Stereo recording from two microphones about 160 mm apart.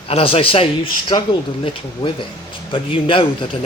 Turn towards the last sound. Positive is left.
turn(degrees=35)  # may be behind; listen again after turning